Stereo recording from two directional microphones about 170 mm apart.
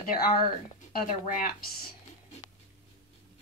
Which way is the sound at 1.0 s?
55° left (ahead or behind).